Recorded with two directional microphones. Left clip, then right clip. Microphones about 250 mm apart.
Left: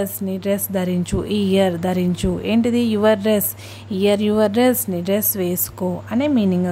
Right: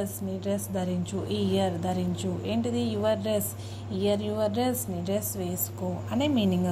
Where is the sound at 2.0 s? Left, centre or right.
Left.